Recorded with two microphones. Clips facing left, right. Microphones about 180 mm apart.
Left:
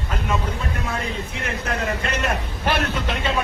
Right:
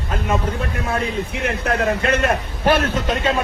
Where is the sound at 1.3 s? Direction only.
60° right (ahead or behind).